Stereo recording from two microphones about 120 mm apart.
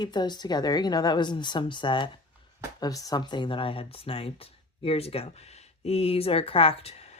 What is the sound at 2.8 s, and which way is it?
Speech, 30° left (ahead or behind).